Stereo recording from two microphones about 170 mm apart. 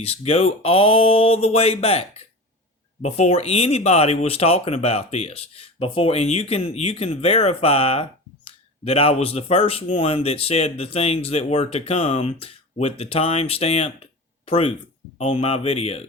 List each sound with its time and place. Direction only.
0.0 s speech: 35° left (ahead or behind)